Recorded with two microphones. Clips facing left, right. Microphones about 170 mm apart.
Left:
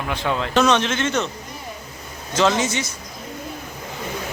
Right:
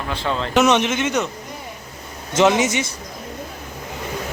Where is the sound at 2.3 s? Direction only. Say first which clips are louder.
Right 3 dB; 20° right (ahead or behind).